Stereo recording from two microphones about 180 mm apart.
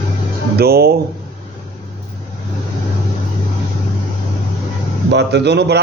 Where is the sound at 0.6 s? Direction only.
60° right (ahead or behind).